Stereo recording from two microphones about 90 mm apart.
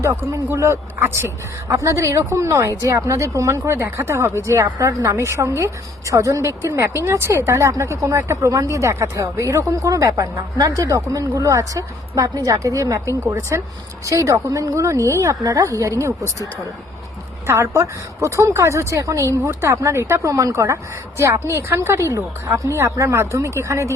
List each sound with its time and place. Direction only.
0.0 s speech: 35° right (ahead or behind)
17.4 s speech: 30° right (ahead or behind)